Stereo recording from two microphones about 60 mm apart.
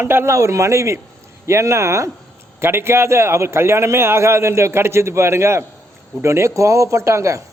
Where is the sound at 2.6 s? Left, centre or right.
Right.